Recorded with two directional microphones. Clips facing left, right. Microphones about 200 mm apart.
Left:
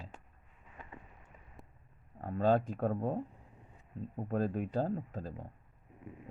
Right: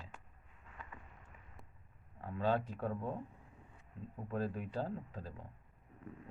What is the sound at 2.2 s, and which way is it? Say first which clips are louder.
Speech: left 6 dB; 45° left (ahead or behind).